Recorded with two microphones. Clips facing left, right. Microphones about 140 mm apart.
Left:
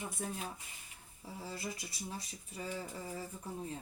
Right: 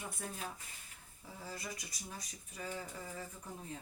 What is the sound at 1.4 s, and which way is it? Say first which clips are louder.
Speech: left 3 dB; 25° left (ahead or behind).